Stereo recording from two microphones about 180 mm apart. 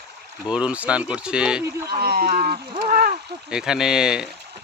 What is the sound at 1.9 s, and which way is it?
Speech, 60° right (ahead or behind).